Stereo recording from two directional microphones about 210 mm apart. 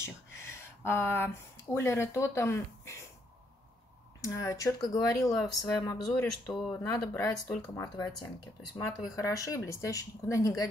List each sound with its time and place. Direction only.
0.0 s speech: 10° left (ahead or behind)
4.2 s speech: 15° left (ahead or behind)
6.0 s speech: centre (ahead or behind)
6.8 s speech: 15° left (ahead or behind)